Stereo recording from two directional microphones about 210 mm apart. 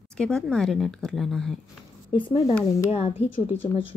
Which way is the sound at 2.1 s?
25° left (ahead or behind).